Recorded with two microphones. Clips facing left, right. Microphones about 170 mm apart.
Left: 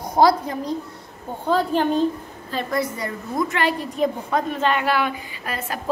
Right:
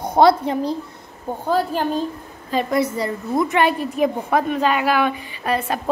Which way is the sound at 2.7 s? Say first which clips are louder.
Right 3 dB; 20° right (ahead or behind).